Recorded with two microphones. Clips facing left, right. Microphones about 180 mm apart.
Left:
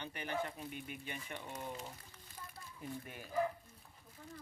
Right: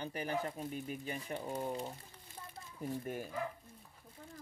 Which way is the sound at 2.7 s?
45° right (ahead or behind).